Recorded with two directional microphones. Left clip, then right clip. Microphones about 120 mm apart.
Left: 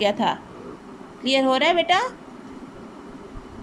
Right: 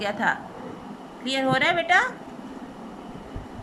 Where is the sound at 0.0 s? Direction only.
20° left (ahead or behind).